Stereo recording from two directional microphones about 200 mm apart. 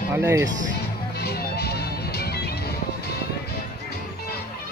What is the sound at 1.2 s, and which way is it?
Music, 55° left (ahead or behind).